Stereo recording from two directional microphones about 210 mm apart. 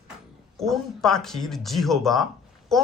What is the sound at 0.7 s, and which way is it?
Speech, centre (ahead or behind).